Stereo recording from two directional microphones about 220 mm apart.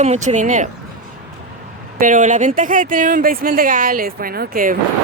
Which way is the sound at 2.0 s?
35° right (ahead or behind).